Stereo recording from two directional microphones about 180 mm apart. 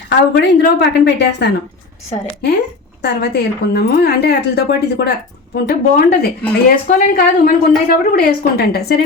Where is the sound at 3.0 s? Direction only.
65° left (ahead or behind).